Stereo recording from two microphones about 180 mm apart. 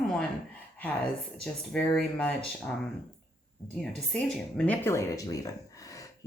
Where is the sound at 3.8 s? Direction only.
5° left (ahead or behind).